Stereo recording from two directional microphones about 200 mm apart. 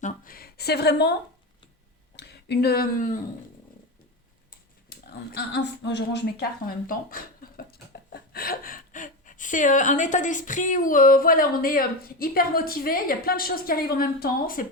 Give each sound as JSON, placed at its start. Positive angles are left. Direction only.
{"t": 0.0, "sound": "speech", "side_deg": 45}
{"t": 2.1, "sound": "speech", "side_deg": 55}
{"t": 4.9, "sound": "speech", "side_deg": 55}